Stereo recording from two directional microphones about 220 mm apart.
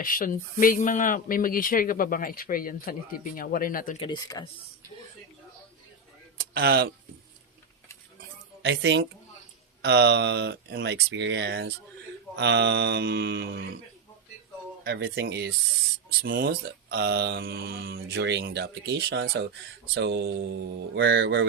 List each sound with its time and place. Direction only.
0.0 s speech: 40° left (ahead or behind)
4.0 s speech: 20° left (ahead or behind)
6.5 s speech: 45° right (ahead or behind)
8.6 s a woman's voice: 55° right (ahead or behind)
14.8 s speech: 50° right (ahead or behind)